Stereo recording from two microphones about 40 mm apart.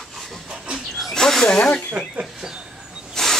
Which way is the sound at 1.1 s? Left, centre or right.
Centre.